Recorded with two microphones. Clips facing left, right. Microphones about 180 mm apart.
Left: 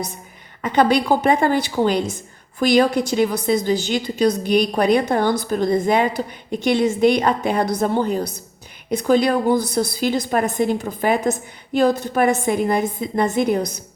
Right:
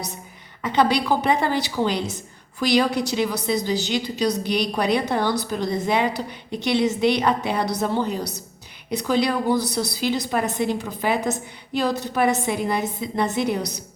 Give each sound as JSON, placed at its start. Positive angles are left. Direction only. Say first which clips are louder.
{"t": 0.6, "sound": "a woman's voice", "louder": "left 3 dB", "side_deg": 50}